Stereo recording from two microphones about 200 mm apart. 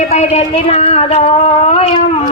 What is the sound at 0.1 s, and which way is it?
Speech, 35° left (ahead or behind).